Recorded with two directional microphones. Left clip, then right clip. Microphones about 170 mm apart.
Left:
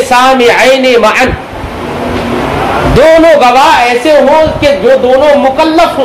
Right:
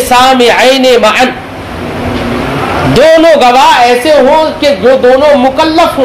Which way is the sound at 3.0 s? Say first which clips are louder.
Even; 35° right (ahead or behind).